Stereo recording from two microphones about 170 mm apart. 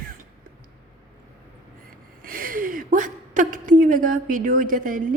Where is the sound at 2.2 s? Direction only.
55° right (ahead or behind).